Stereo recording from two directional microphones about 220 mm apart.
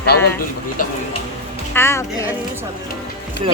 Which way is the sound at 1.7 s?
10° left (ahead or behind).